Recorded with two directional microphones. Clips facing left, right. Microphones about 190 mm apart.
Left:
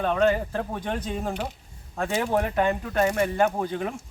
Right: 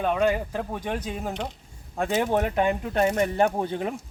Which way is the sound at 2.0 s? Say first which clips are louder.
Right 1 dB; 20° right (ahead or behind).